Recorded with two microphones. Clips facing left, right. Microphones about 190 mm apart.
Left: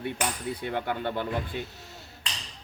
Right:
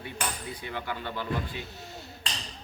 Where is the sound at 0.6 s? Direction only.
55° left (ahead or behind).